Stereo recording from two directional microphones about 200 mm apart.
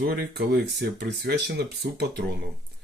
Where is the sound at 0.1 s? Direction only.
55° right (ahead or behind).